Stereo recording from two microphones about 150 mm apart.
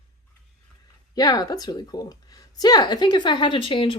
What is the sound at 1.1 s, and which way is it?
Speech, 25° left (ahead or behind).